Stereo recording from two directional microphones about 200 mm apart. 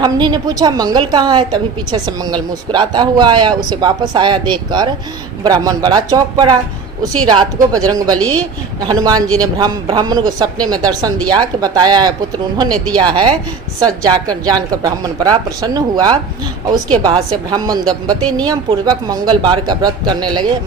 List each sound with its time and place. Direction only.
0.0 s a woman's voice: 20° right (ahead or behind)
8.1 s speech: 5° left (ahead or behind)
8.8 s a woman's voice: 20° right (ahead or behind)